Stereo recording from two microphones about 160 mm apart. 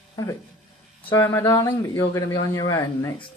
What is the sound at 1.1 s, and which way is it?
A man's voice, 20° left (ahead or behind).